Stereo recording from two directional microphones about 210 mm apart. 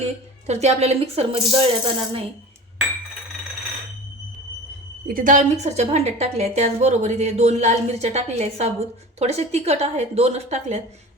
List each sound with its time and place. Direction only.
0.0 s speech: 30° right (ahead or behind)
5.0 s a woman's voice: 40° right (ahead or behind)